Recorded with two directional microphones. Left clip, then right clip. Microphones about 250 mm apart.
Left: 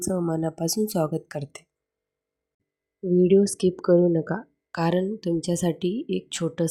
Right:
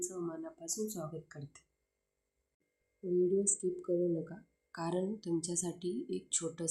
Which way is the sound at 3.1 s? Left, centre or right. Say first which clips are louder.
Left 12 dB; left.